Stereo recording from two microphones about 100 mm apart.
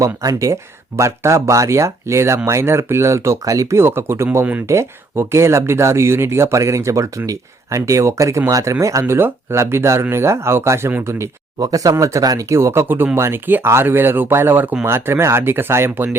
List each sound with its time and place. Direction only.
0.0 s speech: 35° right (ahead or behind)
11.6 s speech: 35° right (ahead or behind)